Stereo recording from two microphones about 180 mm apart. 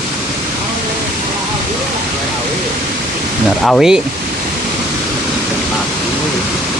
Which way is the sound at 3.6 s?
Centre (ahead or behind).